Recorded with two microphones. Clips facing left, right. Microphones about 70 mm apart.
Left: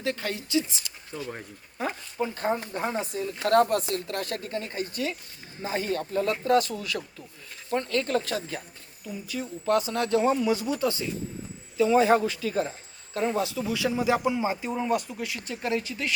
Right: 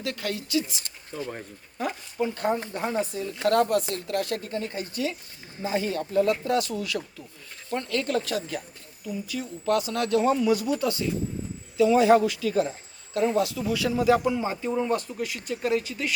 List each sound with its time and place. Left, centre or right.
0.0 s speech: left
0.8 s speech: right
1.8 s speech: left
6.9 s speech: centre
7.7 s speech: left; by 16.1 s centre